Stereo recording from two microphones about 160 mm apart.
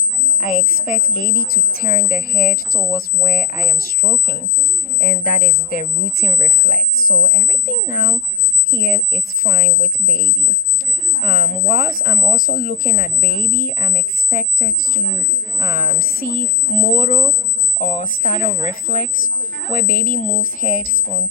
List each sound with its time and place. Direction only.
0.3 s a woman's voice: 55° left (ahead or behind)
11.2 s a woman's voice: 55° left (ahead or behind)